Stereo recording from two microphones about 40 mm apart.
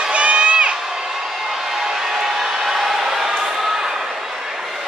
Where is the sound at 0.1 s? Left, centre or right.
Right.